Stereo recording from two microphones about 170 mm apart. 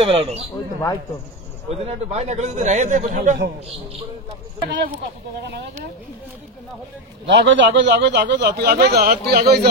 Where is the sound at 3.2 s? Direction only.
65° right (ahead or behind).